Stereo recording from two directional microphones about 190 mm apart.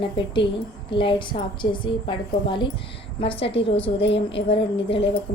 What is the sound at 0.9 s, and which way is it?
A woman's voice, 25° left (ahead or behind).